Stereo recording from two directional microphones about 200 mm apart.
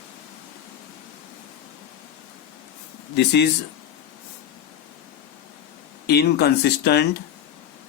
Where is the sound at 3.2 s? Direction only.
55° left (ahead or behind).